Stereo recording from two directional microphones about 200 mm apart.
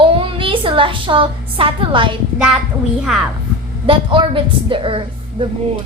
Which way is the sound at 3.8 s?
25° right (ahead or behind).